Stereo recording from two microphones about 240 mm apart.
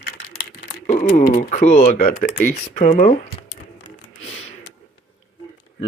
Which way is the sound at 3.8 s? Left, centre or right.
Left.